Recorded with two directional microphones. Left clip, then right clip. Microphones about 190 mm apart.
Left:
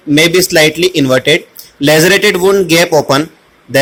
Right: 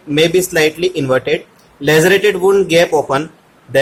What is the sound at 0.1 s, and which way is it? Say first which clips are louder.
A man's voice: left 4 dB; 20° left (ahead or behind).